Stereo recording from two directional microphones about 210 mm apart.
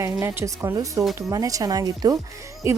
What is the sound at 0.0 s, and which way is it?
A woman's voice, 15° right (ahead or behind).